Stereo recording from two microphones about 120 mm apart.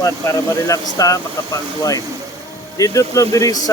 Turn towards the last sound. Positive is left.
turn(degrees=30)  # may be behind; listen again after turning